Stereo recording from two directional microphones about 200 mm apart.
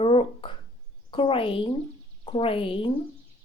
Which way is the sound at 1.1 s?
25° left (ahead or behind).